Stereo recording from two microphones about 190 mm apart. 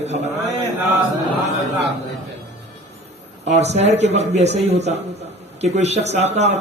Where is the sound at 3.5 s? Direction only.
35° right (ahead or behind).